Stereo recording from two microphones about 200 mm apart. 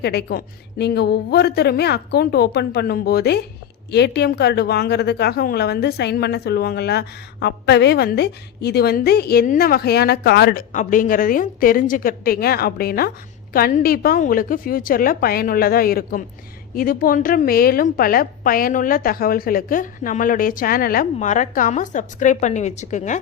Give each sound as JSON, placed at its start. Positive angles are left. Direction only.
{"t": 0.0, "sound": "a woman's voice", "side_deg": 55}